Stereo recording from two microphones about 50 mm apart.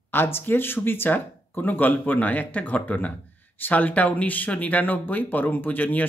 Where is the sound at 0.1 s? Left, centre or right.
Left.